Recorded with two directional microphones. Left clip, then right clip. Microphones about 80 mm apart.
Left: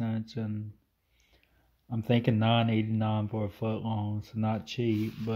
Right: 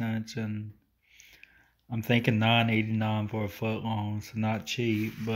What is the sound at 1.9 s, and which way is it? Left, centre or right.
Speech, left.